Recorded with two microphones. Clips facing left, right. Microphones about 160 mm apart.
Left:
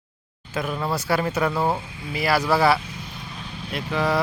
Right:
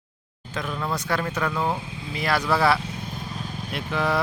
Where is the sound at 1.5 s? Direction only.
30° left (ahead or behind).